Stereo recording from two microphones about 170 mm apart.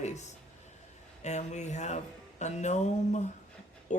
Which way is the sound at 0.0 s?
45° left (ahead or behind).